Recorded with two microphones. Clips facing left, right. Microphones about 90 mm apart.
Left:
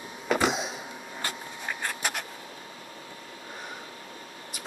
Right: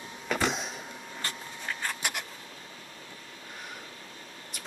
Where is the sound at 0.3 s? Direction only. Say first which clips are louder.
Left 4 dB; 5° left (ahead or behind).